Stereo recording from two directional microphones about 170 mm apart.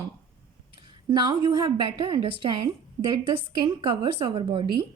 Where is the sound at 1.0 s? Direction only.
25° right (ahead or behind).